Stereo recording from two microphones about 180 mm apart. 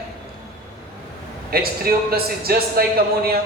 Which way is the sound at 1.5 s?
55° right (ahead or behind).